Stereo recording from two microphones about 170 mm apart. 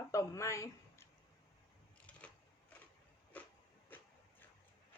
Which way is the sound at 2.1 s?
10° left (ahead or behind).